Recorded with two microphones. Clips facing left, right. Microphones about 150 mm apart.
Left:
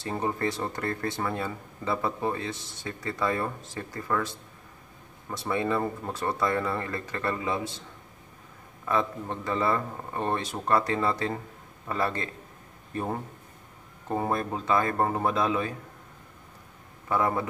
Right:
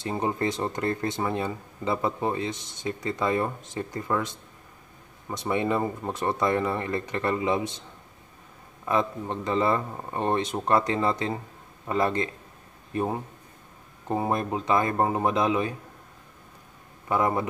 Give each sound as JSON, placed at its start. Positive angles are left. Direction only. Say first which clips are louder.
{"t": 0.0, "sound": "speech", "louder": "right 2 dB", "side_deg": -15}
{"t": 8.8, "sound": "speech", "louder": "right 2 dB", "side_deg": -20}
{"t": 17.1, "sound": "speech", "louder": "right 2 dB", "side_deg": -20}